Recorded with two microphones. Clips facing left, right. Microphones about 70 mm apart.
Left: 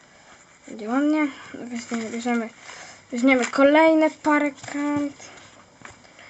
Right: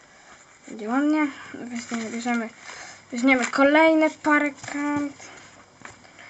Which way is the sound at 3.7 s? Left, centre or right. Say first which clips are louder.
Left 1 dB; right.